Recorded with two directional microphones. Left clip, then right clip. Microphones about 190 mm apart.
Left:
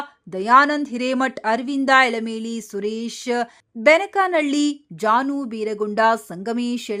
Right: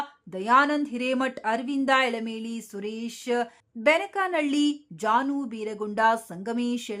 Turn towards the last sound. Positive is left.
turn(degrees=25)  # may be behind; listen again after turning